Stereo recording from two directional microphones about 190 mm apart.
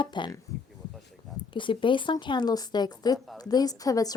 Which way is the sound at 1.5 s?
25° left (ahead or behind).